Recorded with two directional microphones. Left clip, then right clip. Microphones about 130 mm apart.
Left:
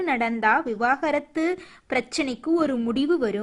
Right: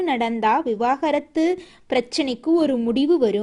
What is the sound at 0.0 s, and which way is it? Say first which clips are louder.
A woman's voice: right 2 dB; 20° right (ahead or behind).